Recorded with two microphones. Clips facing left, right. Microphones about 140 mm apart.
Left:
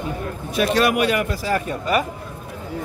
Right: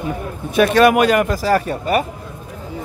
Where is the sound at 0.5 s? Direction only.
55° right (ahead or behind).